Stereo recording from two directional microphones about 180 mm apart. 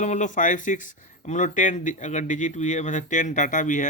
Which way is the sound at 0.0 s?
45° left (ahead or behind).